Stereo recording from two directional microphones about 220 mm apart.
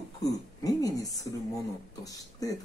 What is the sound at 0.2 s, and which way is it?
Speech, 15° left (ahead or behind).